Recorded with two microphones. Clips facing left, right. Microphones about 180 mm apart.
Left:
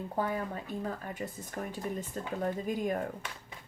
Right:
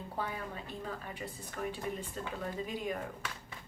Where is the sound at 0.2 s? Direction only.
45° left (ahead or behind).